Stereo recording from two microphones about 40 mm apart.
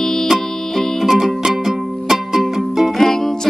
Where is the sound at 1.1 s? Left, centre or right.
Centre.